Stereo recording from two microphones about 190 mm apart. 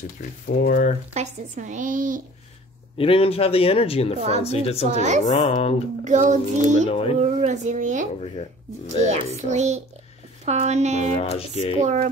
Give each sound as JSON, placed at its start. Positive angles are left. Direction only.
{"t": 0.5, "sound": "speech", "side_deg": 50}
{"t": 1.1, "sound": "speech", "side_deg": -40}
{"t": 3.0, "sound": "a man's voice", "side_deg": 30}
{"t": 6.0, "sound": "speech", "side_deg": -40}
{"t": 9.4, "sound": "speech", "side_deg": -40}
{"t": 11.1, "sound": "a man's voice", "side_deg": 30}
{"t": 11.8, "sound": "speech", "side_deg": -40}